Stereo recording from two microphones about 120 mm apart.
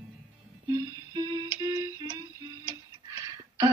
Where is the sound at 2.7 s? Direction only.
30° right (ahead or behind).